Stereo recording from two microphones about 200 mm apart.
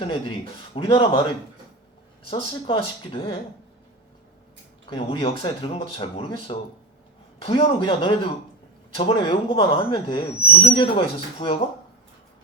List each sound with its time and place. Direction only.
0.0 s speech: 25° left (ahead or behind)
2.3 s speech: 25° left (ahead or behind)
4.9 s speech: 25° left (ahead or behind)